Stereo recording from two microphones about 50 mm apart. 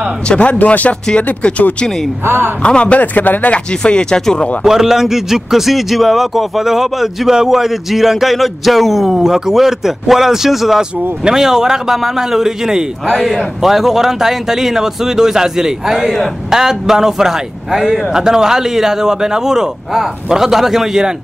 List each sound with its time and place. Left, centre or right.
0.3 s speech: left
2.2 s a man's voice: right
2.6 s speech: left
3.0 s speech: left
3.8 s speech: centre
4.6 s a man's voice: centre